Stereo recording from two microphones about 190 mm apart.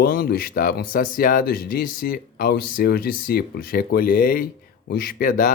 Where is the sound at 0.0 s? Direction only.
50° left (ahead or behind).